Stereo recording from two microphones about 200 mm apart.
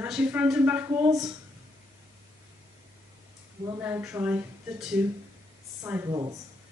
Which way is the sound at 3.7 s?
10° right (ahead or behind).